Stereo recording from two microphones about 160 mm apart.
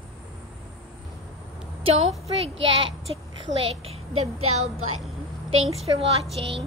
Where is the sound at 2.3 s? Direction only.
35° right (ahead or behind).